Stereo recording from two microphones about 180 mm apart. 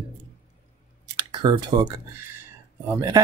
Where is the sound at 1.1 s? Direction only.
25° right (ahead or behind).